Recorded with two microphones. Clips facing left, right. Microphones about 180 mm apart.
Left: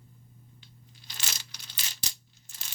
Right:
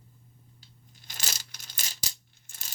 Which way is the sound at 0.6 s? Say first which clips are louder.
Left 2 dB; 40° right (ahead or behind).